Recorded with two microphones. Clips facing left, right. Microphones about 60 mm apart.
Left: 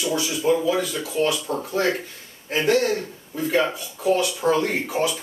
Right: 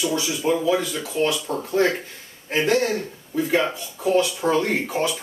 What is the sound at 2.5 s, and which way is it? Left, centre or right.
Speech, centre.